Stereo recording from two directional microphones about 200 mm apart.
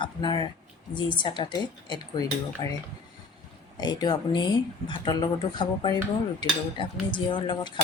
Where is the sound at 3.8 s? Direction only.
20° left (ahead or behind).